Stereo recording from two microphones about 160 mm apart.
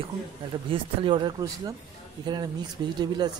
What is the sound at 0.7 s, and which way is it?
A man's voice, 30° right (ahead or behind).